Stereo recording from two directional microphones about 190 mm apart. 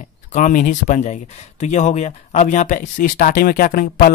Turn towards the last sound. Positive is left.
turn(degrees=45)  # may be behind; listen again after turning